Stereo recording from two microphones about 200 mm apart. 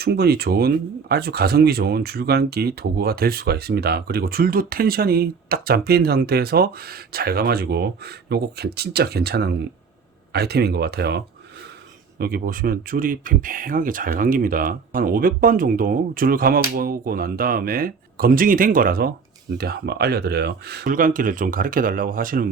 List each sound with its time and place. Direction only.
0.0 s speech: 55° right (ahead or behind)
12.2 s speech: 50° right (ahead or behind)